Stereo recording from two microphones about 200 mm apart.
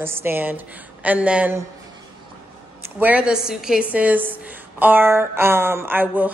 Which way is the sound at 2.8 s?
10° right (ahead or behind).